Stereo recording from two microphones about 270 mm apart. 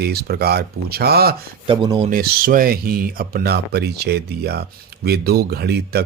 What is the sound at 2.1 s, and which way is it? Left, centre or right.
Speech, right.